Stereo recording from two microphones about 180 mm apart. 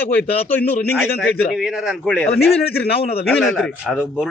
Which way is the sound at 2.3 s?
65° left (ahead or behind).